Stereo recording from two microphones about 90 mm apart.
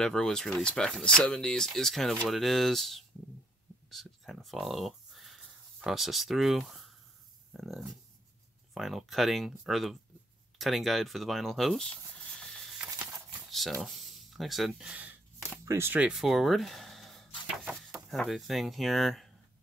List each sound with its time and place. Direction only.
0.0 s speech: 5° left (ahead or behind)
3.9 s a sound: centre (ahead or behind)
7.5 s speech: centre (ahead or behind)
15.6 s speech: 35° right (ahead or behind)
16.1 s speech: 5° right (ahead or behind)